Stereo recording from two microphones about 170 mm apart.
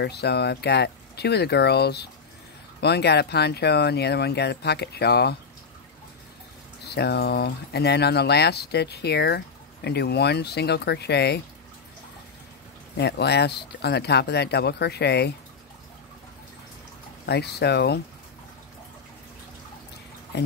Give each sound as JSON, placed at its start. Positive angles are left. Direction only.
{"t": 0.0, "sound": "speech", "side_deg": 75}
{"t": 6.8, "sound": "speech", "side_deg": 75}
{"t": 12.9, "sound": "speech", "side_deg": 80}
{"t": 17.3, "sound": "speech", "side_deg": 75}
{"t": 20.3, "sound": "speech", "side_deg": 75}